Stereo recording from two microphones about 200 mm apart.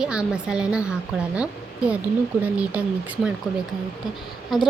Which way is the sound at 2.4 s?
5° right (ahead or behind).